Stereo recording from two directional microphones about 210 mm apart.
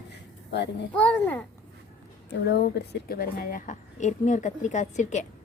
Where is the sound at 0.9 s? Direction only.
5° left (ahead or behind).